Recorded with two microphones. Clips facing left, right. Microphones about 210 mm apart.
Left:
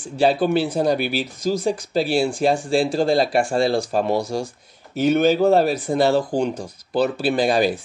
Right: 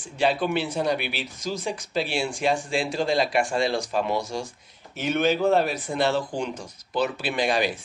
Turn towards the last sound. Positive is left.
turn(degrees=35)  # may be behind; listen again after turning